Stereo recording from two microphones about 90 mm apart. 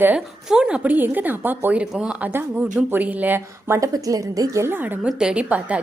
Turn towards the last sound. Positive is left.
turn(degrees=-15)  # may be behind; listen again after turning